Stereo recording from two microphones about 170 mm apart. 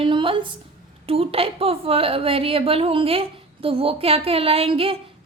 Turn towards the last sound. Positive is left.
turn(degrees=-35)  # may be behind; listen again after turning